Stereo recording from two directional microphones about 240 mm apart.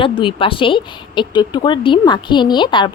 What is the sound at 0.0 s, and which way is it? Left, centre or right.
A woman's voice, left.